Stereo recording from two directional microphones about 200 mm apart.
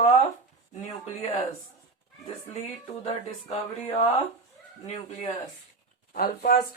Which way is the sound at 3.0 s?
30° left (ahead or behind).